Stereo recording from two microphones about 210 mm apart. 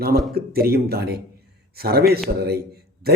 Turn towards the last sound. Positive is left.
turn(degrees=-50)  # may be behind; listen again after turning